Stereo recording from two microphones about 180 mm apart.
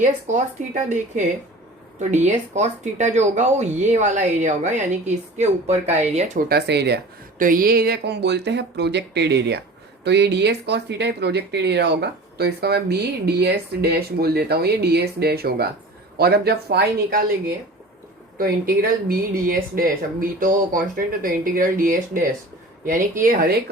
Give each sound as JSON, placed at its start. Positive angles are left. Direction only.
{"t": 0.0, "sound": "speech", "side_deg": -40}
{"t": 6.5, "sound": "speech", "side_deg": -65}
{"t": 18.3, "sound": "speech", "side_deg": -55}